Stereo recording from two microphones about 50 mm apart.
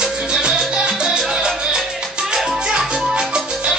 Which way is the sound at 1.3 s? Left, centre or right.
Centre.